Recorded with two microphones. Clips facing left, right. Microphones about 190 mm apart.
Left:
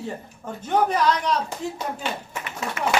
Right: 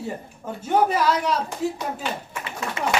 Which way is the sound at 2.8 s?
30° right (ahead or behind).